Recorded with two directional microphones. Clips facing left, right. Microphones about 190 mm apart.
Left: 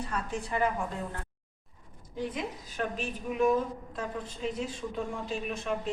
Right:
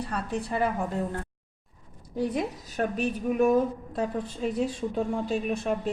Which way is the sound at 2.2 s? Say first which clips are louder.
Right 6 dB; 40° right (ahead or behind).